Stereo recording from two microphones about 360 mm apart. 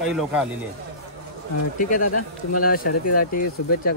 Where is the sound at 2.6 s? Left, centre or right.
Left.